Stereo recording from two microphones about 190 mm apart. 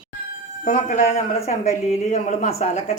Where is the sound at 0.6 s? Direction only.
40° left (ahead or behind).